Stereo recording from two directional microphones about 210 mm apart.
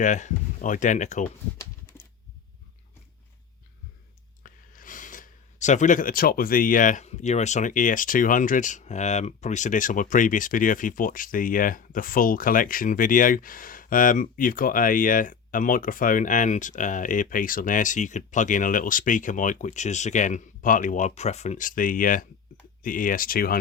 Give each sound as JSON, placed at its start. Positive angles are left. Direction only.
{"t": 0.0, "sound": "speech", "side_deg": 35}
{"t": 4.4, "sound": "speech", "side_deg": 40}